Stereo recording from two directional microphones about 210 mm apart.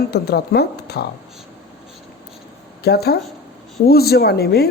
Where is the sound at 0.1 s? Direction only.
50° left (ahead or behind).